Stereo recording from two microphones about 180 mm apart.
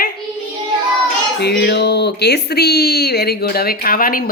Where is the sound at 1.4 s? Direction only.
70° left (ahead or behind).